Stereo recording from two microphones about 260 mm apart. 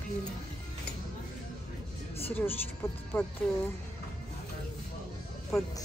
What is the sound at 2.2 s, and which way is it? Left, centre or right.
Speech, centre.